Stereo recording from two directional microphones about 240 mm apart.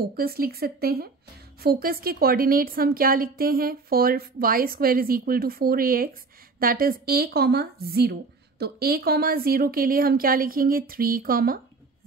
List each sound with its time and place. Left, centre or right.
0.0 s speech: right